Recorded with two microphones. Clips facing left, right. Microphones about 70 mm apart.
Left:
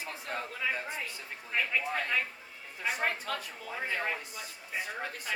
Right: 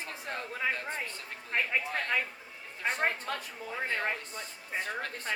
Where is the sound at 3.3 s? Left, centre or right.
Right.